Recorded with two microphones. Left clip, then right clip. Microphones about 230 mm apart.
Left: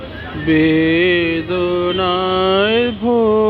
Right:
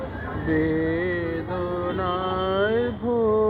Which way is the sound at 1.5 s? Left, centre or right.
Left.